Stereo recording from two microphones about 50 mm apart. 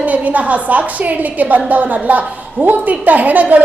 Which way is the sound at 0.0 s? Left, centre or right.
Right.